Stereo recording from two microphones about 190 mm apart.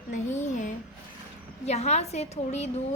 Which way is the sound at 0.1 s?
40° left (ahead or behind).